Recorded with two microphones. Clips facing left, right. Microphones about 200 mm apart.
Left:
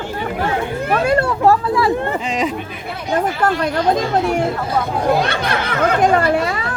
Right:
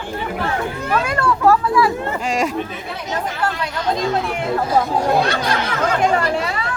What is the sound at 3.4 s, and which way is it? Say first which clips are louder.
Speech: left 4 dB; 50° left (ahead or behind).